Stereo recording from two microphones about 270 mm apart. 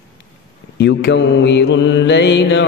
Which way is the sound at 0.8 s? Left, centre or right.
Left.